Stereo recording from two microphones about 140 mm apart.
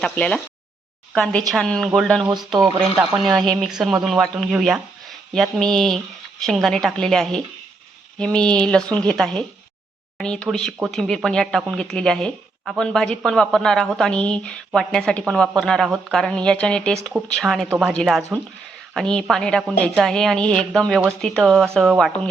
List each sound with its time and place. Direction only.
0.0 s speech: 5° left (ahead or behind)
3.2 s speech: centre (ahead or behind)